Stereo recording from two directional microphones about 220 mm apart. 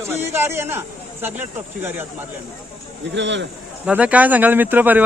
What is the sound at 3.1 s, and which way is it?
Speech, 55° right (ahead or behind).